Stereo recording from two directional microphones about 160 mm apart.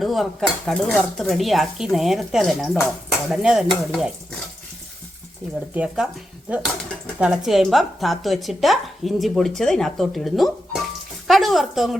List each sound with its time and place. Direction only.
0.0 s a woman's voice: centre (ahead or behind)
5.7 s speech: 5° right (ahead or behind)
7.2 s a woman's voice: 5° right (ahead or behind)